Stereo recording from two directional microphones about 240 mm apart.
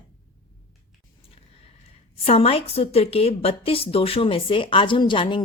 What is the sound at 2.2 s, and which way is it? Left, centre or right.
A woman's voice, left.